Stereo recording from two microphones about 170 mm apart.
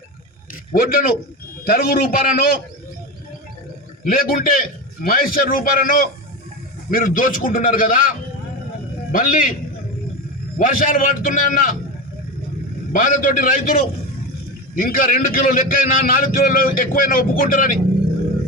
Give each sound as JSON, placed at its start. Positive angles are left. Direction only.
{"t": 0.7, "sound": "a man's voice", "side_deg": 60}
{"t": 4.0, "sound": "a man's voice", "side_deg": 60}
{"t": 9.1, "sound": "a man's voice", "side_deg": 55}
{"t": 10.6, "sound": "a man's voice", "side_deg": 55}
{"t": 12.9, "sound": "a man's voice", "side_deg": 55}
{"t": 14.8, "sound": "a man's voice", "side_deg": 60}